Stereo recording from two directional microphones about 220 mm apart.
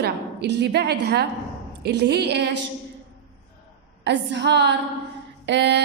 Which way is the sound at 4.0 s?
50° right (ahead or behind).